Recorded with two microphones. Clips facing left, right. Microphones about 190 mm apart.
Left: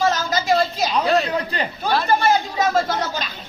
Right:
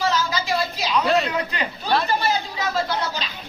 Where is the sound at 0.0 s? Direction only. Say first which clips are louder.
Left 3 dB; 50° left (ahead or behind).